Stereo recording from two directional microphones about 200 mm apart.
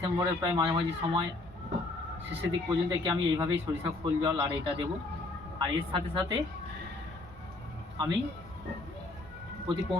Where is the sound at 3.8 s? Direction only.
25° right (ahead or behind).